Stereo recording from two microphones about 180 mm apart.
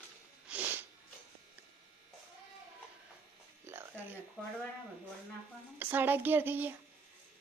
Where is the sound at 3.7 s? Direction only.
15° right (ahead or behind).